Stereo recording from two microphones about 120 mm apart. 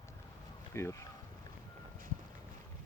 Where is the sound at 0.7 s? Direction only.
20° left (ahead or behind).